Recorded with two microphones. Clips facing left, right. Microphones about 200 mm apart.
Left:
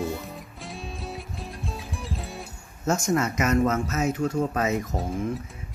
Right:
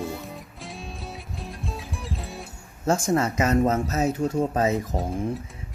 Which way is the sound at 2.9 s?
30° right (ahead or behind).